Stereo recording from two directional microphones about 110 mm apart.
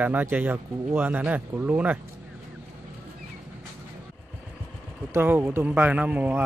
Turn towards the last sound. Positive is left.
turn(degrees=-15)  # may be behind; listen again after turning